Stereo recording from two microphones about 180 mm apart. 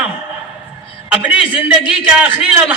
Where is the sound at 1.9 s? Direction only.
5° right (ahead or behind).